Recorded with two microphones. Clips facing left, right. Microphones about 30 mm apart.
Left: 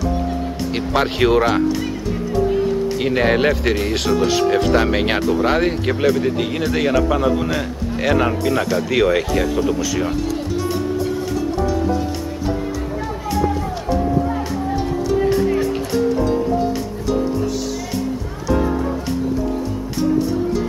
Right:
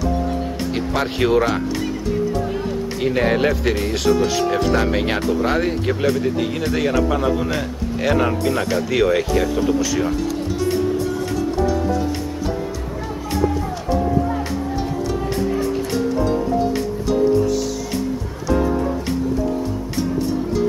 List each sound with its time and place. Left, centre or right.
0.7 s speech: left
2.0 s music: centre
3.0 s speech: centre
14.8 s music: centre
15.4 s music: left
15.9 s music: centre